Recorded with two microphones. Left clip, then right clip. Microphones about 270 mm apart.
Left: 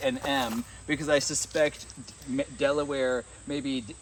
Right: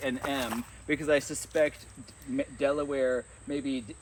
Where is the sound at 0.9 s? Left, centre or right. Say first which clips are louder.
Left 1 dB; left.